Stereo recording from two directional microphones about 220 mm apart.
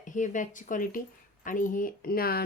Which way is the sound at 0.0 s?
35° left (ahead or behind).